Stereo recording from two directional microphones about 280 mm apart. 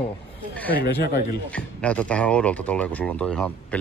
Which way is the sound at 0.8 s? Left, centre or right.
Left.